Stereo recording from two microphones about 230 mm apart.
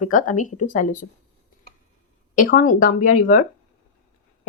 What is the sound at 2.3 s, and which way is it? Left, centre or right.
Speech, left.